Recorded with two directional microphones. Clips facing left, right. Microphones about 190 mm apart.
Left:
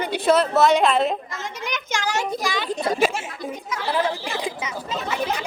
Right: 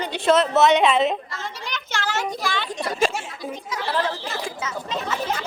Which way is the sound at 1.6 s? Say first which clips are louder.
Left 4 dB; 15° left (ahead or behind).